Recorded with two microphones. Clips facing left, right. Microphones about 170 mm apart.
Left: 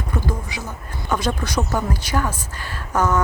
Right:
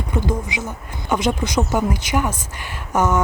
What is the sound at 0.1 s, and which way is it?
Speech, 20° right (ahead or behind).